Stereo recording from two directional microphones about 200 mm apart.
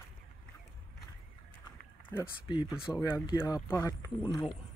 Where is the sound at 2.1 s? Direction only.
20° left (ahead or behind).